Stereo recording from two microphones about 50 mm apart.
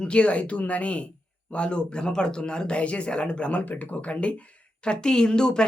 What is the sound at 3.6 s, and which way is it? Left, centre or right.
Speech, left.